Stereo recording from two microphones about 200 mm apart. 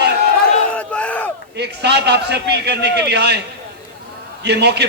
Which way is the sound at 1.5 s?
55° right (ahead or behind).